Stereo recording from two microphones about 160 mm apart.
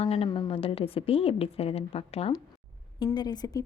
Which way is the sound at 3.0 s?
25° left (ahead or behind).